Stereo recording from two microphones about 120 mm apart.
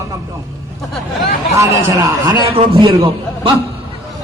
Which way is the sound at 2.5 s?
50° right (ahead or behind).